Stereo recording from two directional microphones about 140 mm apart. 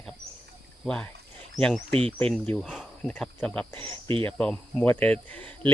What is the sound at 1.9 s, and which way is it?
Speech, 45° right (ahead or behind).